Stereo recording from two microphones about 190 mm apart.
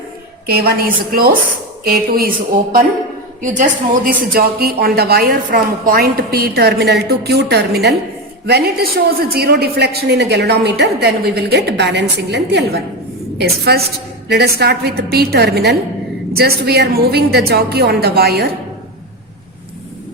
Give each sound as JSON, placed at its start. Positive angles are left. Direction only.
{"t": 0.4, "sound": "a woman's voice", "side_deg": -55}
{"t": 3.4, "sound": "speech", "side_deg": -45}